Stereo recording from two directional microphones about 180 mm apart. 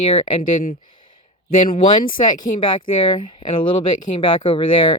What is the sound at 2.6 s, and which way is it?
Speech, 25° left (ahead or behind).